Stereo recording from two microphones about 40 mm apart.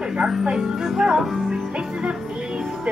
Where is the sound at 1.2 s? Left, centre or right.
Centre.